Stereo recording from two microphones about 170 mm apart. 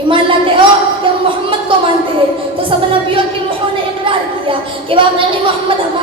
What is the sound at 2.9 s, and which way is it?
Speech, 30° right (ahead or behind).